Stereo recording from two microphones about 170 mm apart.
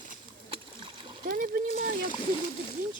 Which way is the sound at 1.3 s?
60° right (ahead or behind).